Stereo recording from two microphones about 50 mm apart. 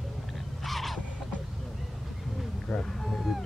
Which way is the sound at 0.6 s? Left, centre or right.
Centre.